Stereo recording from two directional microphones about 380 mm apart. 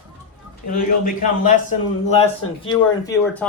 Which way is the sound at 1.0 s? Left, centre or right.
Left.